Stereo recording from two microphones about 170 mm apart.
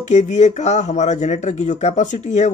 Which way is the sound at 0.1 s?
40° left (ahead or behind).